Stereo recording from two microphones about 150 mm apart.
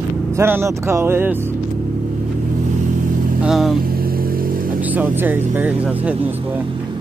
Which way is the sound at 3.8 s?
80° right.